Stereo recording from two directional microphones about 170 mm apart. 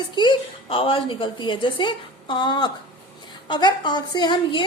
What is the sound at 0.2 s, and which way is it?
A woman's voice, 30° left (ahead or behind).